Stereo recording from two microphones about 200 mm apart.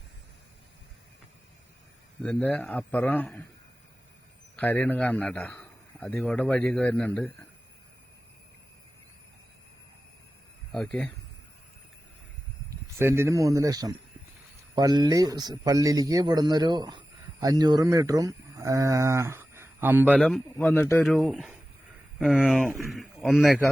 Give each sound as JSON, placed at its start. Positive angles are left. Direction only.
{"t": 2.2, "sound": "a man's voice", "side_deg": 5}
{"t": 4.5, "sound": "a man's voice", "side_deg": 10}
{"t": 10.7, "sound": "speech", "side_deg": 5}
{"t": 13.0, "sound": "a man's voice", "side_deg": -15}
{"t": 20.1, "sound": "a man's voice", "side_deg": 5}
{"t": 21.0, "sound": "a man's voice", "side_deg": 0}